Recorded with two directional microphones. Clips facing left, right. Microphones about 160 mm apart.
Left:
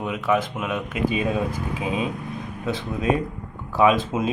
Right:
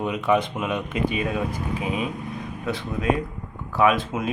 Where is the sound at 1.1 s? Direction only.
25° left (ahead or behind).